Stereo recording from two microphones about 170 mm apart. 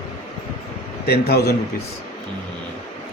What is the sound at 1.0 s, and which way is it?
Speech, 70° left (ahead or behind).